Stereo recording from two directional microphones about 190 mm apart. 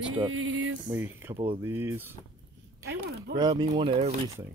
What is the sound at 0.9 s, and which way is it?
Speech, 10° right (ahead or behind).